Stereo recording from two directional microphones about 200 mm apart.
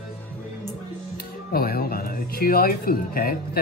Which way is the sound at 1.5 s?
50° left (ahead or behind).